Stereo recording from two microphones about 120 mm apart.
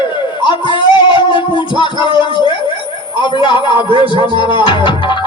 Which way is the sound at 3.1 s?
40° left (ahead or behind).